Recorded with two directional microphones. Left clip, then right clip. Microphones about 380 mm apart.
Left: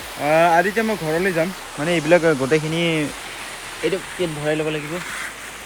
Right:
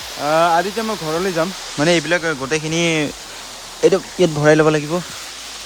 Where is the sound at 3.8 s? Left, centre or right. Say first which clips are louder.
Right 9 dB; right.